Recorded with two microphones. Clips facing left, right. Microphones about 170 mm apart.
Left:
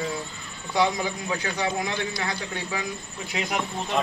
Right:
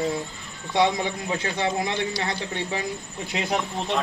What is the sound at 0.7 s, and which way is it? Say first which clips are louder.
A man's voice: right 2 dB; 25° right (ahead or behind).